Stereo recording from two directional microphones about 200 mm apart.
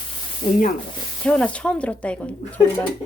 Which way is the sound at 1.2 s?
5° left (ahead or behind).